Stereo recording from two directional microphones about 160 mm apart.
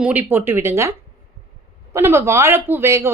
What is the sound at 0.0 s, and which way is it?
Speech, 10° right (ahead or behind).